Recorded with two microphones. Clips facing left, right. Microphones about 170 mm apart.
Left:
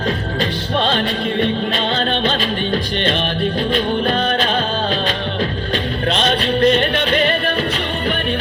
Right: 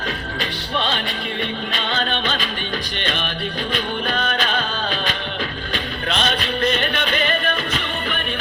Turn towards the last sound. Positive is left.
turn(degrees=40)  # may be behind; listen again after turning